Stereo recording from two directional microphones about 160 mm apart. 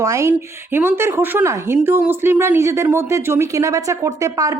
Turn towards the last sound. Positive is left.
turn(degrees=-20)  # may be behind; listen again after turning